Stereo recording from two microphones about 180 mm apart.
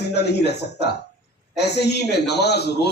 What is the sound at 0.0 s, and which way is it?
A man's voice, 70° left (ahead or behind).